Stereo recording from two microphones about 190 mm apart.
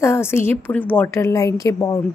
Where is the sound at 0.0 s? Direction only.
15° left (ahead or behind).